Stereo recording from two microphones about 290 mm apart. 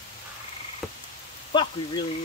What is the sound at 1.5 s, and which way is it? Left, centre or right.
Speech, centre.